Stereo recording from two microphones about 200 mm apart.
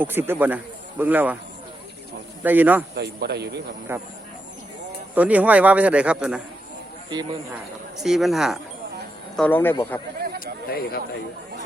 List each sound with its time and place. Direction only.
0.0 s a man's voice: 10° right (ahead or behind)
2.4 s a man's voice: 10° right (ahead or behind)
2.9 s speech: 55° right (ahead or behind)
3.9 s a man's voice: 10° right (ahead or behind)
5.1 s a man's voice: 5° right (ahead or behind)
7.1 s speech: 20° right (ahead or behind)
7.9 s speech: centre (ahead or behind)
10.4 s a sound: 50° left (ahead or behind)